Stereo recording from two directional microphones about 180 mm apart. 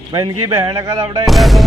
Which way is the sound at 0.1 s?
25° right (ahead or behind).